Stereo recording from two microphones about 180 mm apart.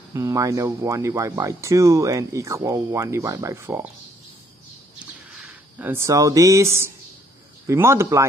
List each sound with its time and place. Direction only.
0.1 s speech: 20° right (ahead or behind)
4.9 s a sound: 5° right (ahead or behind)
7.6 s speech: 15° right (ahead or behind)